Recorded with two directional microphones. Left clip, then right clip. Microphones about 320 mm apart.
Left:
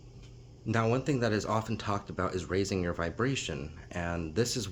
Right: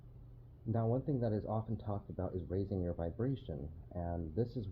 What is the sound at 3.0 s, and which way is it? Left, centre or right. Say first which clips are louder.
Speech: left 8 dB; centre.